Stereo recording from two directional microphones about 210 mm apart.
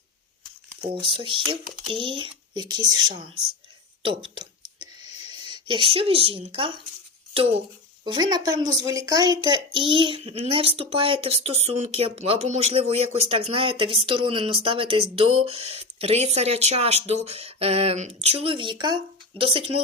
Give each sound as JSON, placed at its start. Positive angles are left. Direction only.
{"t": 0.8, "sound": "speech", "side_deg": -25}
{"t": 4.0, "sound": "a sound", "side_deg": -25}
{"t": 8.0, "sound": "speech", "side_deg": -20}